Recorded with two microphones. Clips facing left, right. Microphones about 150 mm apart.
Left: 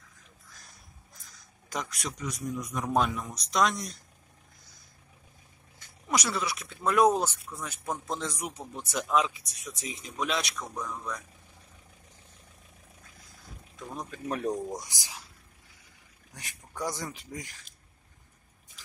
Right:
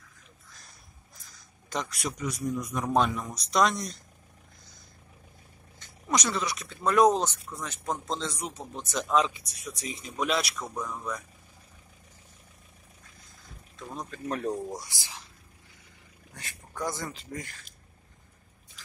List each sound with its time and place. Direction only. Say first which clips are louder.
1.7 s speech: right 3 dB; centre (ahead or behind)
5.8 s speech: right 1 dB; 10° left (ahead or behind)
13.9 s speech: right 1 dB; 10° left (ahead or behind)
16.3 s speech: right 1 dB; 15° left (ahead or behind)